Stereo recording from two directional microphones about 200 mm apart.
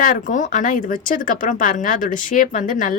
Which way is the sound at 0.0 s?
40° left (ahead or behind).